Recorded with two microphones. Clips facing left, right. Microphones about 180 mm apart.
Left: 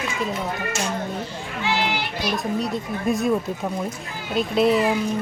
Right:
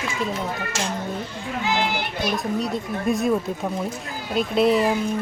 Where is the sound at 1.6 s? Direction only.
50° right (ahead or behind).